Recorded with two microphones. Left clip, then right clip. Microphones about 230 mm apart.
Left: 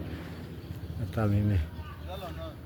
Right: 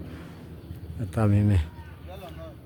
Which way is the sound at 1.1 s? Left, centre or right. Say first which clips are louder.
Right 5 dB; right.